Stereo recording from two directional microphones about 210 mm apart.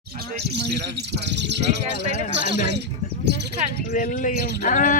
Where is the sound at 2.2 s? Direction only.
40° left (ahead or behind).